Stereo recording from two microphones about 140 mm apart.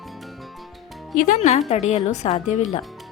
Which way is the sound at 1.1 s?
65° left (ahead or behind).